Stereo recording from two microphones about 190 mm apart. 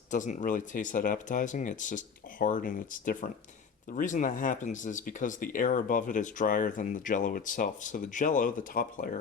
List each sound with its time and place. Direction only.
0.1 s speech: 40° left (ahead or behind)